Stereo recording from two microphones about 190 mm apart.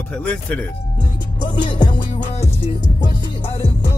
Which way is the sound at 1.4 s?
25° left (ahead or behind).